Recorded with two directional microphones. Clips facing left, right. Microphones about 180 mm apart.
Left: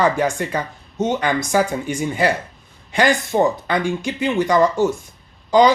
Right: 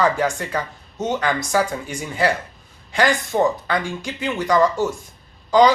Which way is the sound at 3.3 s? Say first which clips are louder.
Left 2 dB; 20° left (ahead or behind).